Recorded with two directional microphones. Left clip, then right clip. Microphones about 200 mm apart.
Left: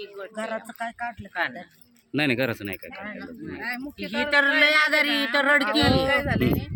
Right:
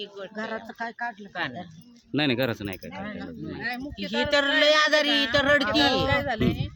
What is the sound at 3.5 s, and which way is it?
Speech, 10° right (ahead or behind).